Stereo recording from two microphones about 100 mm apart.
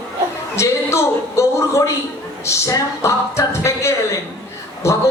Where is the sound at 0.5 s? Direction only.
25° left (ahead or behind).